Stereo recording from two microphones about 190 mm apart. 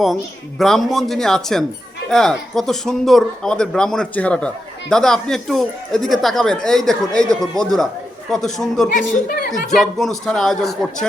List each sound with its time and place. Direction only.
0.6 s speech: centre (ahead or behind)
9.0 s a woman's voice: 45° left (ahead or behind)
9.7 s speech: centre (ahead or behind)